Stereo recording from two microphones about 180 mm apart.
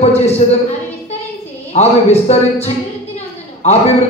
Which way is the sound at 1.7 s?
35° left (ahead or behind).